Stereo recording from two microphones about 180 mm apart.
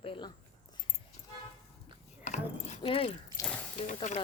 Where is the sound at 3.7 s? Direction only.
40° left (ahead or behind).